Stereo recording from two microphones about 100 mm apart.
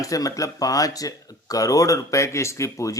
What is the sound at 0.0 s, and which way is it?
Speech, 35° left (ahead or behind).